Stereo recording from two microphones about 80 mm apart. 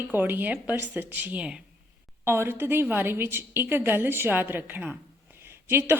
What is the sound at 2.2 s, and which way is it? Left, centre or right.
A woman's voice, right.